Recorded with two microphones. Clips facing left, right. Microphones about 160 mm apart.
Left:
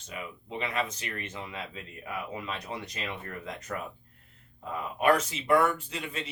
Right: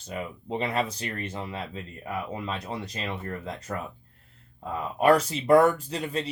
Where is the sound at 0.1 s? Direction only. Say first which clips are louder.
Right 6 dB; 35° right (ahead or behind).